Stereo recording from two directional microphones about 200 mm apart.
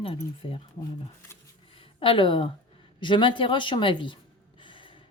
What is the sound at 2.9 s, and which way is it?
Speech, 25° left (ahead or behind).